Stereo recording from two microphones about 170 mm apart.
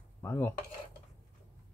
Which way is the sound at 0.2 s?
15° left (ahead or behind).